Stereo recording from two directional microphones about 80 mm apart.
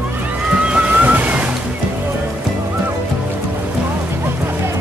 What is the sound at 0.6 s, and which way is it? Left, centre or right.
Waves, centre.